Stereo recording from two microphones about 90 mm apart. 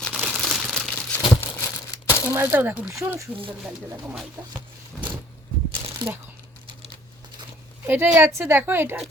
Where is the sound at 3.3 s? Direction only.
85° right.